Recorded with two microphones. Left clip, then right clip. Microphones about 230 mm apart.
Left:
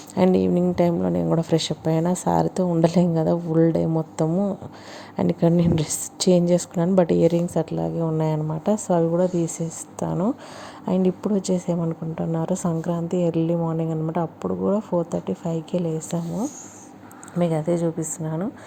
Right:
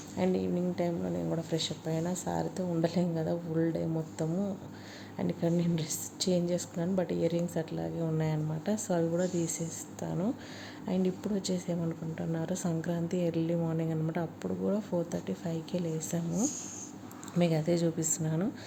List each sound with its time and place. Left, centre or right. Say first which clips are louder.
0.2 s a woman's voice: left 12 dB; left
17.3 s a woman's voice: left 7 dB; centre